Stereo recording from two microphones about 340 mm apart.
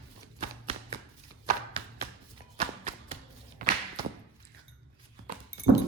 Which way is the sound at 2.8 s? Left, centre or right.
Right.